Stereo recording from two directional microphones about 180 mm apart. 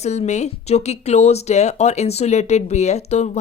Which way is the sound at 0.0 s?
40° left (ahead or behind).